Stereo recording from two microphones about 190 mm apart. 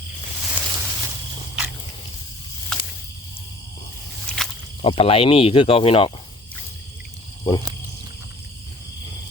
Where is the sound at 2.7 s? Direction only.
5° left (ahead or behind).